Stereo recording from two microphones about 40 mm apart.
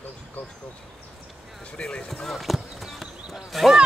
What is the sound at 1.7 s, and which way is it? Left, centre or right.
Speech, left.